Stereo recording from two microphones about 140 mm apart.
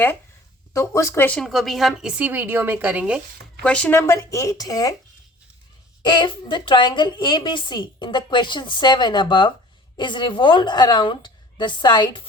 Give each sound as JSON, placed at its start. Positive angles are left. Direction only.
{"t": 0.7, "sound": "speech", "side_deg": 20}
{"t": 1.4, "sound": "a woman's voice", "side_deg": 0}
{"t": 3.6, "sound": "speech", "side_deg": 10}
{"t": 6.0, "sound": "a woman's voice", "side_deg": 35}